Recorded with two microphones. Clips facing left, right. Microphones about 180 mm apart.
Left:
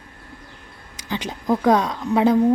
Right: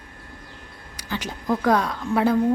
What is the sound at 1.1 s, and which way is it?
A woman's voice, 20° left (ahead or behind).